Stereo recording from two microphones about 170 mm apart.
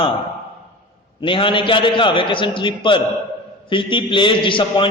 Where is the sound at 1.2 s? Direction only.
30° left (ahead or behind).